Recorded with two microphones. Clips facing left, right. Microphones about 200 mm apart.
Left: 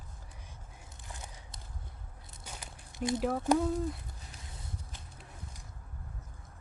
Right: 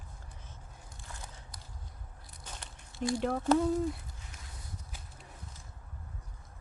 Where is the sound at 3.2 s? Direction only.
5° left (ahead or behind).